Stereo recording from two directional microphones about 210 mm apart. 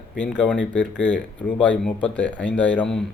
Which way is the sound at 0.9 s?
65° left (ahead or behind).